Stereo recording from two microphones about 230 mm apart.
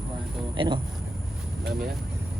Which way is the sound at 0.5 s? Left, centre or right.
Right.